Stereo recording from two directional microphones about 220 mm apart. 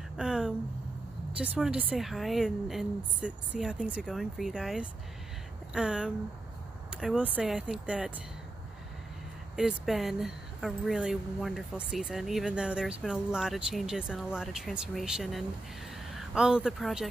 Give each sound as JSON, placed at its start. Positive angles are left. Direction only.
{"t": 0.2, "sound": "a sound", "side_deg": -5}
{"t": 1.4, "sound": "speech", "side_deg": -5}
{"t": 9.6, "sound": "speech", "side_deg": 0}